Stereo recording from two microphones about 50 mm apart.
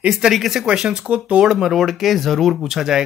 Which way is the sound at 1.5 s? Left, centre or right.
Centre.